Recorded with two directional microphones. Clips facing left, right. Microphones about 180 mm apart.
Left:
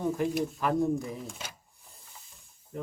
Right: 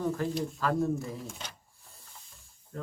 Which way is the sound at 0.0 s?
15° left (ahead or behind).